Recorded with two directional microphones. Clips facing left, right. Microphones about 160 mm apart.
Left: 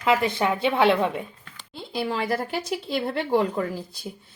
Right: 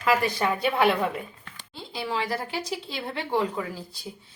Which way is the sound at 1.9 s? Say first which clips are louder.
Left 3 dB; 50° left (ahead or behind).